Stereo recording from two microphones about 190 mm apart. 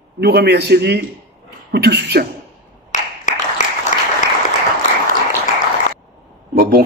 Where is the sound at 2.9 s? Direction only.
40° left (ahead or behind).